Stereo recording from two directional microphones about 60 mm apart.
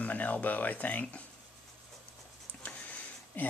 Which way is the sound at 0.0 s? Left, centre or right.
Left.